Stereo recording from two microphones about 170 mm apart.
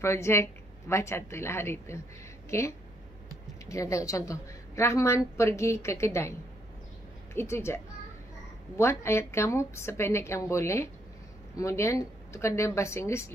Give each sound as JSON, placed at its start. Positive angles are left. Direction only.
{"t": 0.0, "sound": "a woman's voice", "side_deg": 15}
{"t": 3.6, "sound": "a woman's voice", "side_deg": 20}
{"t": 7.3, "sound": "a woman's voice", "side_deg": 15}